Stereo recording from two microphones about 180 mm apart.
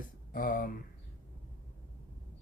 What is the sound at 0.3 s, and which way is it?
Speech, 50° left (ahead or behind).